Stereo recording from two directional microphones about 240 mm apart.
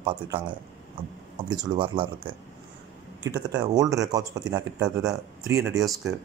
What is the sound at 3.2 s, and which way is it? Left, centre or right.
A man's voice, centre.